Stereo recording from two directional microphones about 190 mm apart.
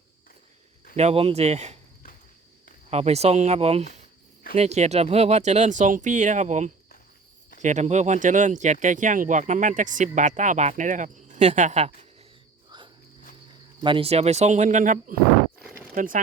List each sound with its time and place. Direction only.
0.9 s speech: 35° right (ahead or behind)
2.9 s speech: 35° right (ahead or behind)
13.8 s speech: 30° right (ahead or behind); by 16.2 s 45° right (ahead or behind)